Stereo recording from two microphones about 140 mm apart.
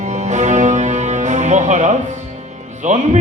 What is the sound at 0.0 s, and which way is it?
Music, 55° right (ahead or behind).